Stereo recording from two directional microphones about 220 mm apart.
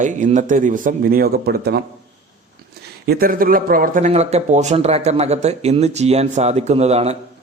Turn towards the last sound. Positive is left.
turn(degrees=-30)  # may be behind; listen again after turning